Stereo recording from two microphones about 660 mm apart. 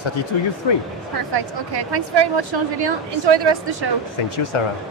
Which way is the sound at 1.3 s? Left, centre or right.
Right.